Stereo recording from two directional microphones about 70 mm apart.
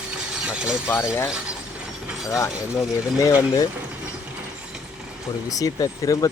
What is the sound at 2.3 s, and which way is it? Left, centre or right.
Speech, left.